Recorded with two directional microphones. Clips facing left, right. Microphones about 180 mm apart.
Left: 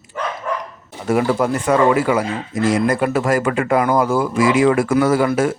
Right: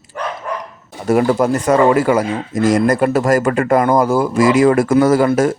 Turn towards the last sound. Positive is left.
turn(degrees=-40)  # may be behind; listen again after turning